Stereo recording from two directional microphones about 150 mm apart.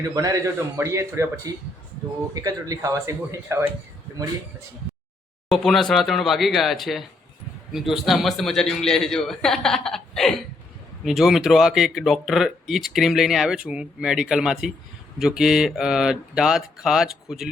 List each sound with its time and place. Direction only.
0.0 s a man's voice: 25° right (ahead or behind)
2.3 s a man's voice: 25° right (ahead or behind)
5.5 s speech: centre (ahead or behind)